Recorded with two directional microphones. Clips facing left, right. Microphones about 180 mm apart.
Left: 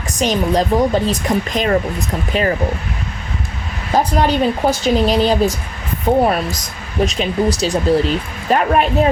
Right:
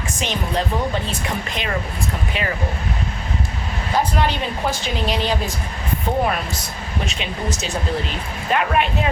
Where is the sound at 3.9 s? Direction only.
40° left (ahead or behind).